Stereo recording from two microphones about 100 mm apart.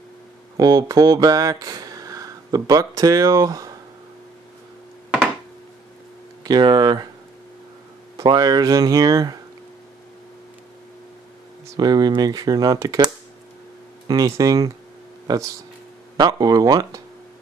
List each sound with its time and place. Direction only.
0.6 s speech: 40° right (ahead or behind)
6.4 s speech: 45° right (ahead or behind)
8.2 s speech: 40° right (ahead or behind)
11.6 s speech: 40° right (ahead or behind)